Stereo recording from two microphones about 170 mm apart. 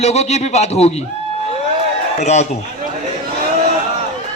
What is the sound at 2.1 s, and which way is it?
Speech, 40° left (ahead or behind).